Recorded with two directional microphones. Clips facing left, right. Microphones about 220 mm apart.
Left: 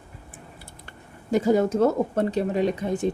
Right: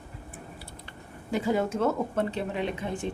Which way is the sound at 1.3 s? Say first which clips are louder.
Left 6 dB; 40° left (ahead or behind).